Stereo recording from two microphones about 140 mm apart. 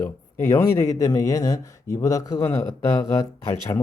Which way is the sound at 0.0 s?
20° left (ahead or behind).